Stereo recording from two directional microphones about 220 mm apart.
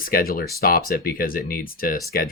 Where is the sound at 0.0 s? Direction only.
40° left (ahead or behind).